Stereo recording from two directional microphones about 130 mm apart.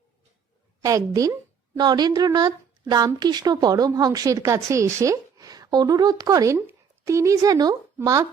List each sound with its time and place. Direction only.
0.8 s a woman's voice: 25° right (ahead or behind)